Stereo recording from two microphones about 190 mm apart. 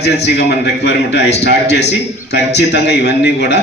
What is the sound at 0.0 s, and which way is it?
A man's voice, 60° left (ahead or behind).